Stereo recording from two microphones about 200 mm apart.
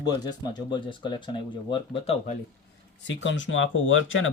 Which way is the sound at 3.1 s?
70° left (ahead or behind).